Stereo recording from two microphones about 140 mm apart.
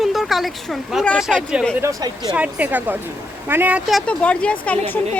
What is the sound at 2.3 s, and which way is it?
Speech, 10° right (ahead or behind).